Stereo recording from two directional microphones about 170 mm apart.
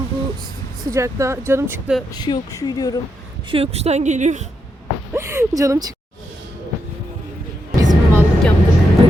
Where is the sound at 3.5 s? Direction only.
35° right (ahead or behind).